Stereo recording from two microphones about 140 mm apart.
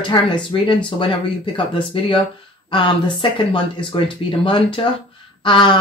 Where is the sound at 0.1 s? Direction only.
35° left (ahead or behind).